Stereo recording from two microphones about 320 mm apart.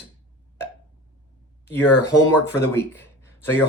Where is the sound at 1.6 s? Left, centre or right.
Centre.